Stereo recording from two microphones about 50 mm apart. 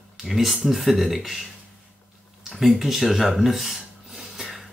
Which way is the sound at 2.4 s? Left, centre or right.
Centre.